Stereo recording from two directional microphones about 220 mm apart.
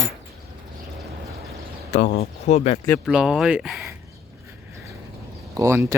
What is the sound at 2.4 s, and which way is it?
Speech, 30° left (ahead or behind).